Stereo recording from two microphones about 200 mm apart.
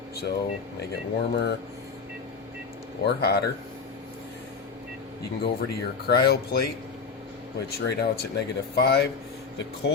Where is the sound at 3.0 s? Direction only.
55° left (ahead or behind).